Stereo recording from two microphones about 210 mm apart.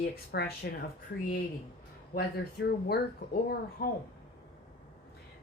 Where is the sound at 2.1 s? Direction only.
50° left (ahead or behind).